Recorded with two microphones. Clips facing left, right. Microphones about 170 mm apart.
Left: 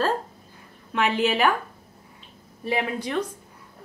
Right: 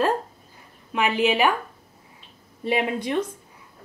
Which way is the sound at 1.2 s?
5° right (ahead or behind).